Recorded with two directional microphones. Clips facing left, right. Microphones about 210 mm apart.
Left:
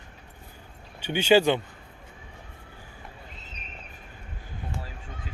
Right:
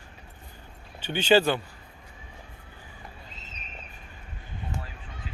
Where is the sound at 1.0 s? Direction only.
10° left (ahead or behind).